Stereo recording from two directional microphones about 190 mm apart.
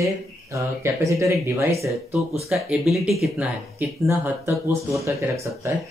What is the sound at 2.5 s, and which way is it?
Speech, centre (ahead or behind).